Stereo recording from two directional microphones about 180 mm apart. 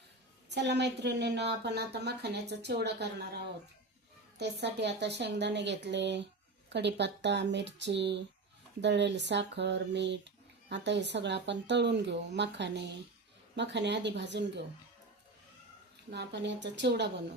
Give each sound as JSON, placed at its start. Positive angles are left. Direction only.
{"t": 0.5, "sound": "a woman's voice", "side_deg": -70}
{"t": 16.0, "sound": "a woman's voice", "side_deg": -70}